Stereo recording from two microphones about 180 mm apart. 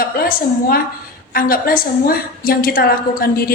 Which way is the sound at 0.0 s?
55° left (ahead or behind).